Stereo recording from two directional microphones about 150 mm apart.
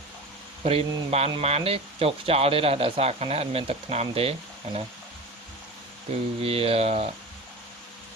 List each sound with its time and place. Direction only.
0.6 s speech: 40° right (ahead or behind)
6.4 s speech: 40° right (ahead or behind)